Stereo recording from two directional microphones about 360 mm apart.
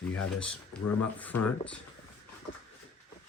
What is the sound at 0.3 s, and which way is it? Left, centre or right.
Speech, centre.